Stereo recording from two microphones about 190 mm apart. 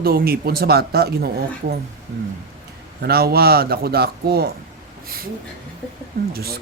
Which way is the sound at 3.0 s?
55° right (ahead or behind).